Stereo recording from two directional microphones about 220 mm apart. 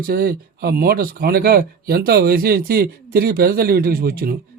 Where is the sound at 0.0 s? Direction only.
45° right (ahead or behind).